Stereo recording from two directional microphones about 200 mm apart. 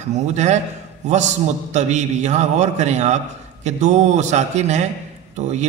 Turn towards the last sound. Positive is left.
turn(degrees=-35)  # may be behind; listen again after turning